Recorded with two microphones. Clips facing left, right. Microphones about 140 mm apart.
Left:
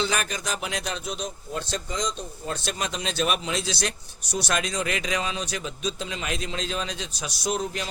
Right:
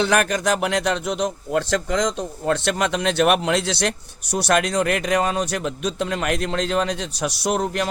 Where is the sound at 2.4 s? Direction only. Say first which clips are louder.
Right 10 dB; 70° right (ahead or behind).